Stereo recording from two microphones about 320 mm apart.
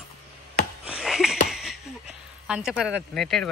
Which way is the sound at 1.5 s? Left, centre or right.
Centre.